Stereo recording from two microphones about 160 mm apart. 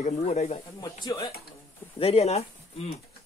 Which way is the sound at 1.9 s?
40° left (ahead or behind).